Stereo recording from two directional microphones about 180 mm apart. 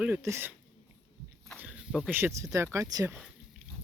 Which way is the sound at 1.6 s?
5° right (ahead or behind).